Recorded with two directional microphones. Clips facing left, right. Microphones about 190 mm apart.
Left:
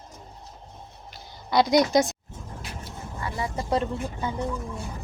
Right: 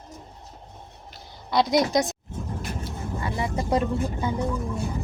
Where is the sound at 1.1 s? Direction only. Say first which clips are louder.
Left 1 dB; centre (ahead or behind).